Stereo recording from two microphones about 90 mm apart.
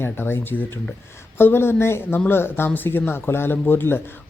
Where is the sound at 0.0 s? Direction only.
25° left (ahead or behind).